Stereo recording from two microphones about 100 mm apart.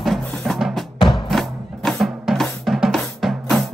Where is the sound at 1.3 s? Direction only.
Centre (ahead or behind).